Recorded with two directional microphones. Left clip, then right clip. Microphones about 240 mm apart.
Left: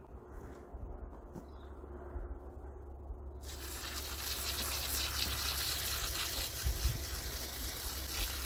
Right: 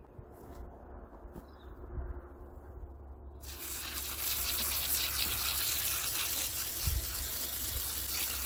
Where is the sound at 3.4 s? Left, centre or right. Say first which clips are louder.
Right 2 dB; centre.